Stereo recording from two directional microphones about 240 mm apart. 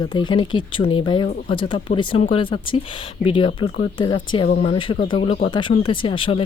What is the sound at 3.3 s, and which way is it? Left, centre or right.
Speech, left.